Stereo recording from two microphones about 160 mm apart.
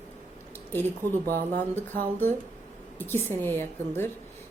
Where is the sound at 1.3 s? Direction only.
55° right (ahead or behind).